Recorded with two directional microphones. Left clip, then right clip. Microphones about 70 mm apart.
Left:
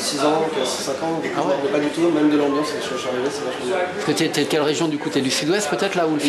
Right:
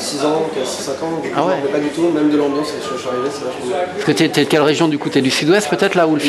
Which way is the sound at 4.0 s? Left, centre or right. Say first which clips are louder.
Right 5 dB; right.